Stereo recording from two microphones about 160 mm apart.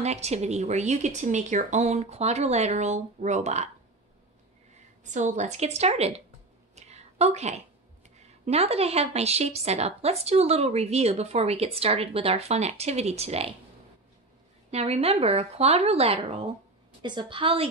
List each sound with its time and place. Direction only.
0.0 s speech: 45° right (ahead or behind)
5.0 s speech: 50° right (ahead or behind)
6.7 s a sound: 40° right (ahead or behind)
8.5 s a woman's voice: 40° right (ahead or behind)
14.7 s a woman's voice: 40° right (ahead or behind)